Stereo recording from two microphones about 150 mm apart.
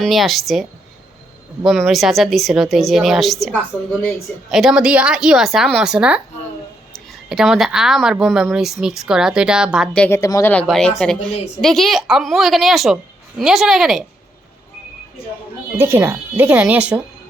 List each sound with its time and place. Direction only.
0.0 s a woman's voice: centre (ahead or behind)
10.1 s speech: 20° left (ahead or behind)
10.5 s a woman's voice: 5° left (ahead or behind)
15.8 s speech: 15° right (ahead or behind)